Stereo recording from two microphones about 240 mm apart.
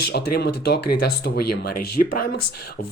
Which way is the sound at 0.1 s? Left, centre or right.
Left.